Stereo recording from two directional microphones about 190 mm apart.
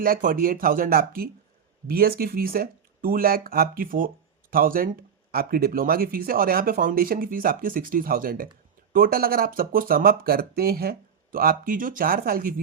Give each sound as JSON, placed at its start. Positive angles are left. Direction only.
{"t": 0.0, "sound": "speech", "side_deg": -50}